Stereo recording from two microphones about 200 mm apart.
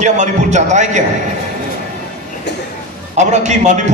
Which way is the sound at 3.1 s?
35° right (ahead or behind).